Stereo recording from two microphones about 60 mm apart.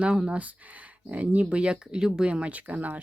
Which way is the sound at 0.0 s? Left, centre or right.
Centre.